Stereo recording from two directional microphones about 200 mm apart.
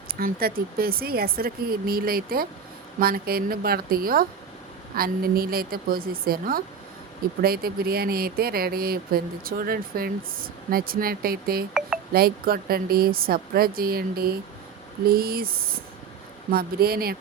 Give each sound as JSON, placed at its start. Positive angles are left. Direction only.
{"t": 0.1, "sound": "speech", "side_deg": -50}